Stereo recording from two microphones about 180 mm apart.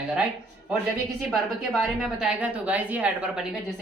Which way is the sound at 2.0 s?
5° right (ahead or behind).